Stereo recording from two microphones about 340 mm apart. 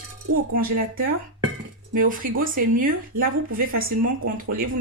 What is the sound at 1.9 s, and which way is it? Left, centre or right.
Speech, right.